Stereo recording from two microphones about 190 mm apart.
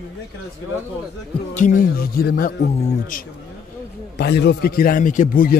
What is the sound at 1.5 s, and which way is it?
A man's voice, 40° left (ahead or behind).